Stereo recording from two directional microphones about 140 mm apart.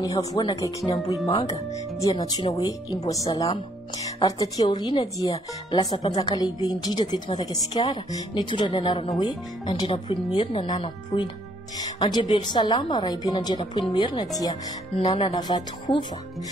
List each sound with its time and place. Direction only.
0.0 s a woman's voice: 25° left (ahead or behind); by 15.3 s 45° left (ahead or behind)
15.3 s a woman's voice: 30° left (ahead or behind)